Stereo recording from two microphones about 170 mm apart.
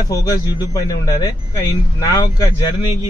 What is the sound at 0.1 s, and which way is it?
A man's voice, 20° left (ahead or behind).